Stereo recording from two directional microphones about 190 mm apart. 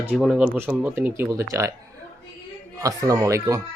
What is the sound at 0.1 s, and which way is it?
Speech, 5° right (ahead or behind).